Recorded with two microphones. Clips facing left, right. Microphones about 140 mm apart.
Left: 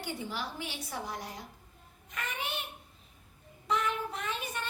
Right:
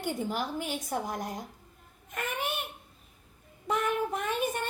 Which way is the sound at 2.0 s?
50° right (ahead or behind).